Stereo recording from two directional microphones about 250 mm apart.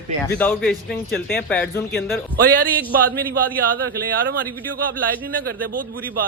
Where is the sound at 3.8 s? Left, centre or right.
Right.